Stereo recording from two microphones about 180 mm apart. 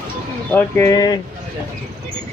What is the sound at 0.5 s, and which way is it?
Speech, 15° left (ahead or behind).